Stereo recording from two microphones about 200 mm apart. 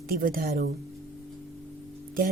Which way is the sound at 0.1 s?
45° right (ahead or behind).